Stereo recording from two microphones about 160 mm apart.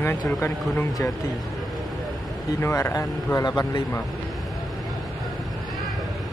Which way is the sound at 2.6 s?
15° left (ahead or behind).